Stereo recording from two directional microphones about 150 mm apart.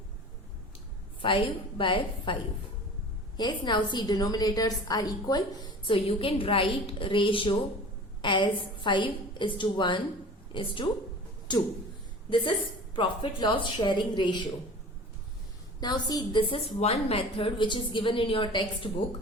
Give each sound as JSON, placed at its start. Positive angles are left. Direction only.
{"t": 1.2, "sound": "a woman's voice", "side_deg": 35}
{"t": 15.8, "sound": "a woman's voice", "side_deg": 25}